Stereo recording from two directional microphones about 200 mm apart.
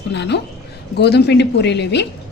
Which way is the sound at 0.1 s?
60° left (ahead or behind).